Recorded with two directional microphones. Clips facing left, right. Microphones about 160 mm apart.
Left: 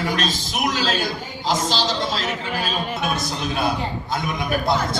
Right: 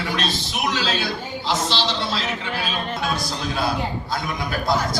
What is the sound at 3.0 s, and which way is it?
A man's voice, 20° left (ahead or behind).